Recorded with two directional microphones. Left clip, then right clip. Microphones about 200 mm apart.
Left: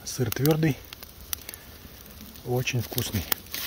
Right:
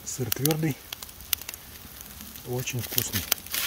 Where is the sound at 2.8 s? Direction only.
5° left (ahead or behind).